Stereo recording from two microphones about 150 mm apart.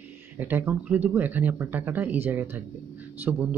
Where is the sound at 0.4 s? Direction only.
10° right (ahead or behind).